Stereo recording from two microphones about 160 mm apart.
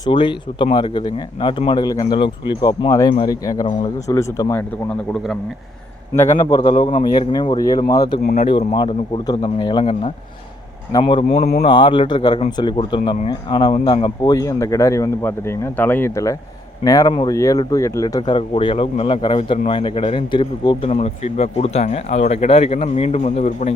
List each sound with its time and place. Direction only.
0.0 s speech: 30° left (ahead or behind)
6.1 s speech: 20° left (ahead or behind)
10.9 s speech: 30° left (ahead or behind); by 23.7 s 50° left (ahead or behind)